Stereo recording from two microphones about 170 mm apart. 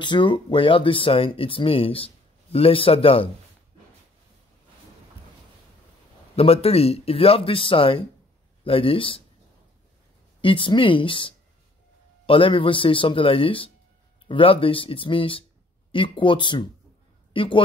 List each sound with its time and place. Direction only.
0.0 s speech: 25° left (ahead or behind)
6.3 s speech: 35° left (ahead or behind)
10.4 s speech: 30° left (ahead or behind)